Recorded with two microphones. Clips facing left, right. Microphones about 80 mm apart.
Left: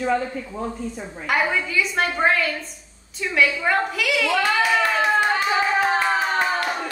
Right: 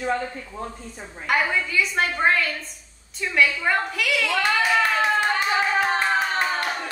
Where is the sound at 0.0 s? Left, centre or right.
Centre.